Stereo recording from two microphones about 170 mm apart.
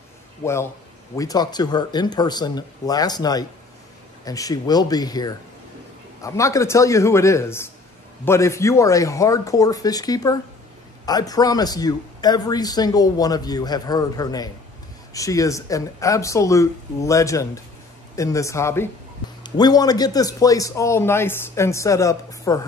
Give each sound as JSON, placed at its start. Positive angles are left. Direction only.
{"t": 0.4, "sound": "a man's voice", "side_deg": 15}